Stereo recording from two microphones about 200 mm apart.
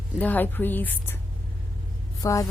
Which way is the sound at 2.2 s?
15° left (ahead or behind).